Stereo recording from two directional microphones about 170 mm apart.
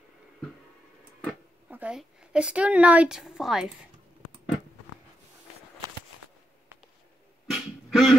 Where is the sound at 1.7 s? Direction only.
5° right (ahead or behind).